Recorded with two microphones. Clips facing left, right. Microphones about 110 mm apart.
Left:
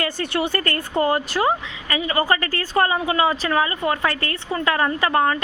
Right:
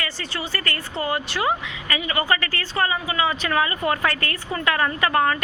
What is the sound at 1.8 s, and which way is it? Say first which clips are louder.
A woman's voice: left 3 dB; 30° left (ahead or behind).